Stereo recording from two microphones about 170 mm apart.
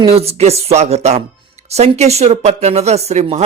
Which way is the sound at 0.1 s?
35° right (ahead or behind).